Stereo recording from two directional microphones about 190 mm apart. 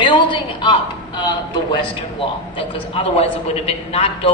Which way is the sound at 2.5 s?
25° left (ahead or behind).